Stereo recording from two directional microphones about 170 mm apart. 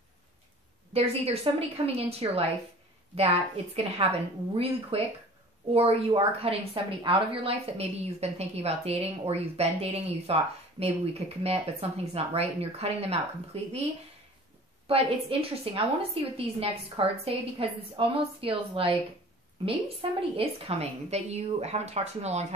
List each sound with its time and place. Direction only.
0.9 s a woman's voice: 35° right (ahead or behind)
14.9 s a woman's voice: 35° right (ahead or behind)